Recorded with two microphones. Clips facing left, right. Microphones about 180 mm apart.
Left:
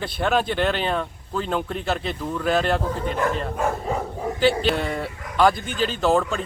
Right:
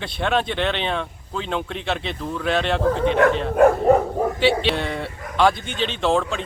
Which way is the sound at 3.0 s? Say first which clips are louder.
Right 7 dB; 75° right (ahead or behind).